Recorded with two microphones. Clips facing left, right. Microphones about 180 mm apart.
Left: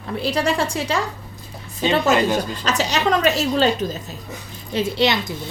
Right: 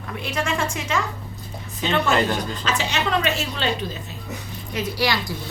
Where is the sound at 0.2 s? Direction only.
35° left (ahead or behind).